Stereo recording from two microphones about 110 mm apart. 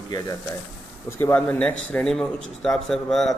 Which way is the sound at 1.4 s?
10° left (ahead or behind).